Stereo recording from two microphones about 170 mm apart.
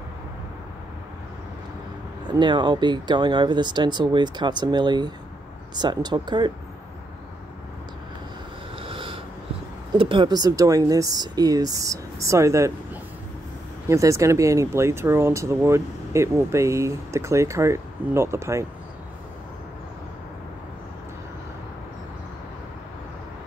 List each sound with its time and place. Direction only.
2.3 s speech: 25° right (ahead or behind)
8.7 s snort: 30° right (ahead or behind)
9.9 s speech: 30° right (ahead or behind)
13.8 s speech: 20° right (ahead or behind)